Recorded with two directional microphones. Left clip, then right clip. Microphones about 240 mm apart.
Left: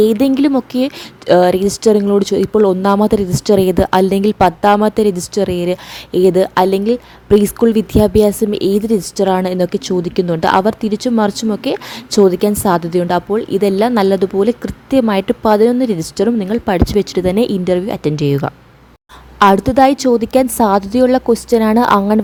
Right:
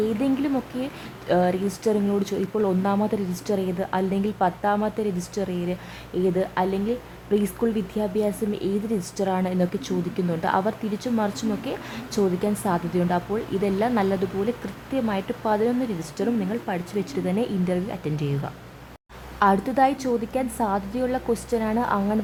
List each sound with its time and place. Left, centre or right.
0.2 s speech: left